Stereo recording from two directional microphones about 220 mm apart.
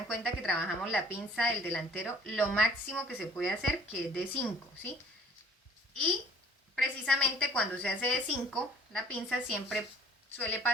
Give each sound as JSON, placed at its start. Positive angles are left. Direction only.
{"t": 0.1, "sound": "a woman's voice", "side_deg": 0}
{"t": 6.7, "sound": "a woman's voice", "side_deg": 5}